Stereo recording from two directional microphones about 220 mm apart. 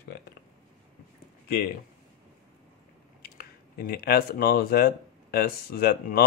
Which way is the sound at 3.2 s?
45° left (ahead or behind).